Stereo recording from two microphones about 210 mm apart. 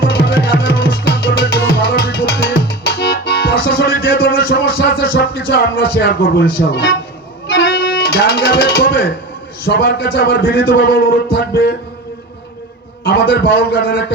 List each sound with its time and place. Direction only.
0.0 s music: 50° left (ahead or behind)
9.6 s a man's voice: 50° left (ahead or behind)
13.1 s a man's voice: 50° left (ahead or behind)